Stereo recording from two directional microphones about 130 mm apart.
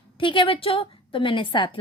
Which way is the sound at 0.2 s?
40° left (ahead or behind).